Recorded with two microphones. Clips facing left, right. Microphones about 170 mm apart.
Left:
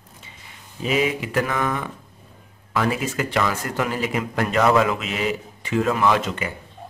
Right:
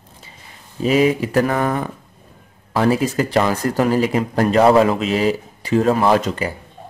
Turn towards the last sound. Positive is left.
turn(degrees=-35)  # may be behind; listen again after turning